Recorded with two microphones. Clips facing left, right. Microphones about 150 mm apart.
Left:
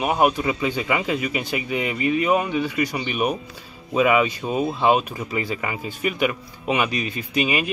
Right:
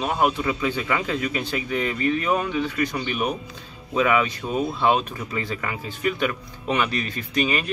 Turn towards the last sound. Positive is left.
turn(degrees=10)  # may be behind; listen again after turning